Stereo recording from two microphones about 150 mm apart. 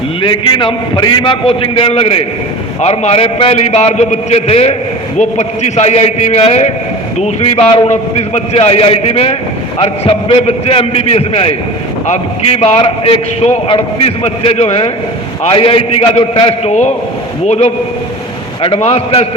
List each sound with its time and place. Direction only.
0.2 s a man's voice: 35° left (ahead or behind)